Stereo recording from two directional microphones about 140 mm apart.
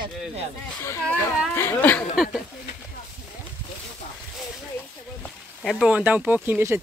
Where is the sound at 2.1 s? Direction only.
Centre (ahead or behind).